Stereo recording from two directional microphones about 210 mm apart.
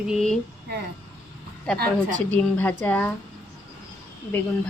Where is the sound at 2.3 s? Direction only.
10° left (ahead or behind).